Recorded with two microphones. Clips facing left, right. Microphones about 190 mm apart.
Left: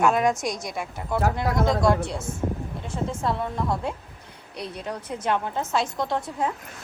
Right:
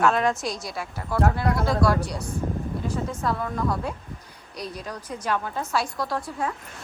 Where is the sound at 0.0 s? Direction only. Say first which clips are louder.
Left 1 dB; 15° left (ahead or behind).